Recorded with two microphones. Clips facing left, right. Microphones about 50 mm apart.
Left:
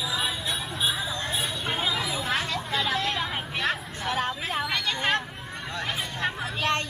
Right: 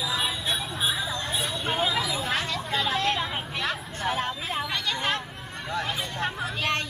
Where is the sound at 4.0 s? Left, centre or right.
Centre.